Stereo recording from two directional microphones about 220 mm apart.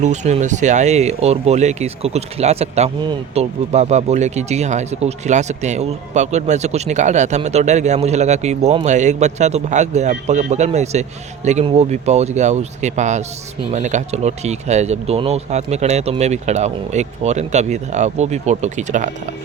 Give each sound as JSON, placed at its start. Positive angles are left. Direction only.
{"t": 0.0, "sound": "speech", "side_deg": -30}